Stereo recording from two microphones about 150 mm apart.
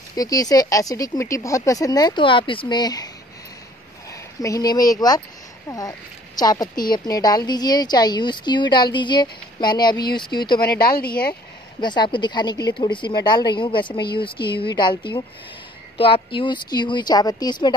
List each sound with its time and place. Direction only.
0.1 s a woman's voice: 25° left (ahead or behind)
4.1 s a woman's voice: 20° left (ahead or behind)
10.6 s a woman's voice: 90° left
11.8 s a woman's voice: 30° left (ahead or behind)